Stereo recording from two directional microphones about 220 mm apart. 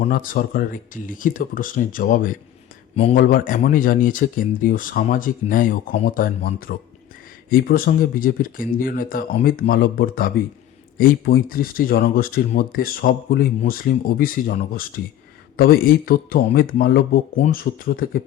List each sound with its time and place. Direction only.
0.0 s speech: 40° left (ahead or behind)
2.9 s speech: 25° left (ahead or behind)
3.2 s speech: 40° left (ahead or behind)